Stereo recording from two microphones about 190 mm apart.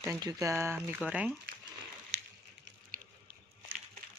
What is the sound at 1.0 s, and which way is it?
Speech, 5° right (ahead or behind).